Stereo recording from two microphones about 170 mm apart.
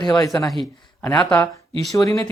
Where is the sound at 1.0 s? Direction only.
10° left (ahead or behind).